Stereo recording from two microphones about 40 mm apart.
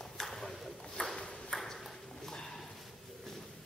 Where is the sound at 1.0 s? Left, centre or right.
Left.